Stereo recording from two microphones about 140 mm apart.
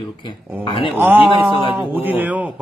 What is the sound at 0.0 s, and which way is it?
Speech, 35° left (ahead or behind).